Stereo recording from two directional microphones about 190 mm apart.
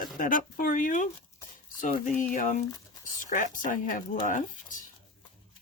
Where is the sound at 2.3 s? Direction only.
40° left (ahead or behind).